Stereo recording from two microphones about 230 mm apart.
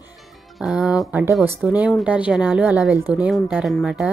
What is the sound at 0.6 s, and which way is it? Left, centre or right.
Speech, centre.